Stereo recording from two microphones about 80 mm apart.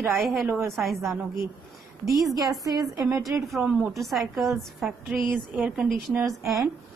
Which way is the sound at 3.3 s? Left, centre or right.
Right.